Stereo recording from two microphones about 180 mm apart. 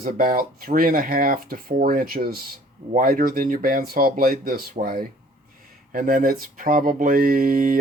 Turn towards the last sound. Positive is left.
turn(degrees=-50)  # may be behind; listen again after turning